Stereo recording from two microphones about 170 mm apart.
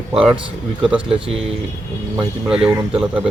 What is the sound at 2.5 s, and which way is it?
Speech, 5° right (ahead or behind).